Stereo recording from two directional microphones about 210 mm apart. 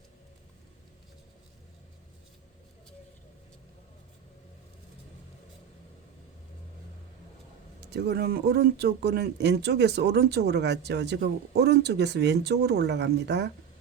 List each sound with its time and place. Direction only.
7.8 s speech: 50° right (ahead or behind)